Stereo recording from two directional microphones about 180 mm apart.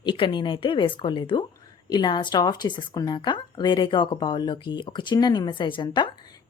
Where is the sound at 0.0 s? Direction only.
25° left (ahead or behind).